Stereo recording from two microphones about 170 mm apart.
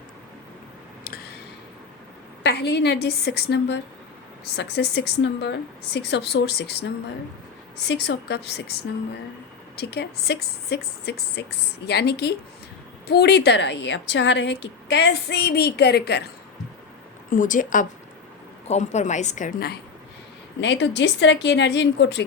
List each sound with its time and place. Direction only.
2.4 s speech: 80° left
7.9 s a woman's voice: 90° left; by 16.3 s 70° left (ahead or behind)
17.2 s a woman's voice: 50° left (ahead or behind)
20.6 s a woman's voice: 90° left